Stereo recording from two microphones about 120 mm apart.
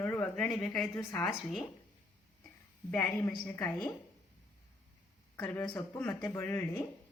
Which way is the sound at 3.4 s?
20° left (ahead or behind).